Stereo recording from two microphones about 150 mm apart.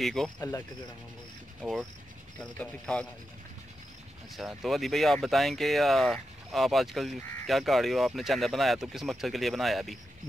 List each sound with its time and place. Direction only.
0.0 s speech: centre (ahead or behind)
0.4 s speech: 20° left (ahead or behind)
1.6 s speech: centre (ahead or behind)
4.4 s speech: centre (ahead or behind)